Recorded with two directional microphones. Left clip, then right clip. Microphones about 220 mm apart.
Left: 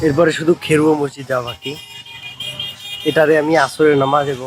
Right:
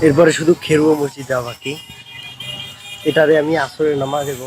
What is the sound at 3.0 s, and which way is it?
Speech, 5° left (ahead or behind).